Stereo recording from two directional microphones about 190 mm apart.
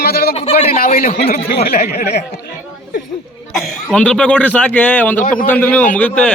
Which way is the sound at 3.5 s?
Centre (ahead or behind).